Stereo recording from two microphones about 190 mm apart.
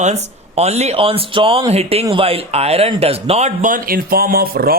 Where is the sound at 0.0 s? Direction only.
35° right (ahead or behind).